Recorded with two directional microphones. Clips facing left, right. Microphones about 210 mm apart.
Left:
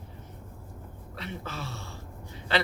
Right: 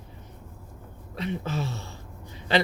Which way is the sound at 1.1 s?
15° right (ahead or behind).